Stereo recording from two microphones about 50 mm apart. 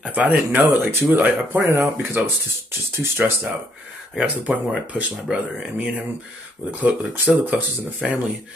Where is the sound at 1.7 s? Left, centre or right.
Right.